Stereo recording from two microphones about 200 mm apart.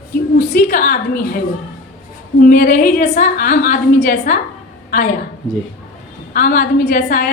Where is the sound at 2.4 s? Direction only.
45° left (ahead or behind).